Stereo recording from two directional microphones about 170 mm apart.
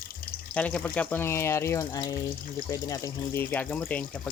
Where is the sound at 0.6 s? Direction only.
10° left (ahead or behind).